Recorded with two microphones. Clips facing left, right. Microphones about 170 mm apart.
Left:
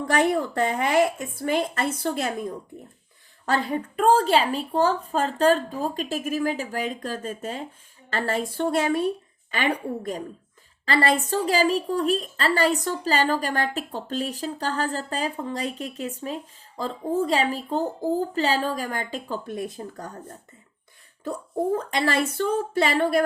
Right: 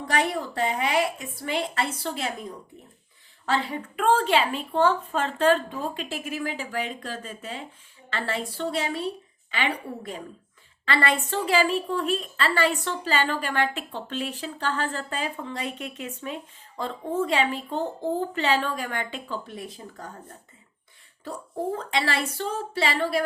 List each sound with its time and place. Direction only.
0.1 s a woman's voice: 50° left (ahead or behind)
21.8 s a woman's voice: 45° left (ahead or behind)